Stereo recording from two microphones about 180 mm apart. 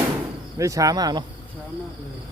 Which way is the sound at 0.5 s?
15° right (ahead or behind).